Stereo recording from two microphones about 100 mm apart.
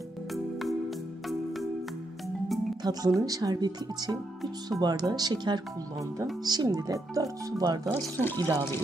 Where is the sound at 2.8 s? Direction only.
40° right (ahead or behind).